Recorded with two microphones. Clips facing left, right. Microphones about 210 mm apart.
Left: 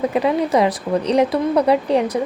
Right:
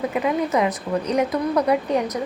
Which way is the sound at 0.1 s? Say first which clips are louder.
Left 4 dB; 30° left (ahead or behind).